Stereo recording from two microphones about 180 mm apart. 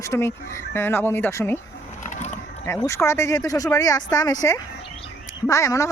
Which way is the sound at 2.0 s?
40° left (ahead or behind).